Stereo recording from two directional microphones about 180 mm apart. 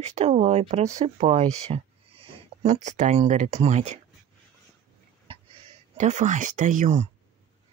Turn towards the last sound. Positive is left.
turn(degrees=-40)  # may be behind; listen again after turning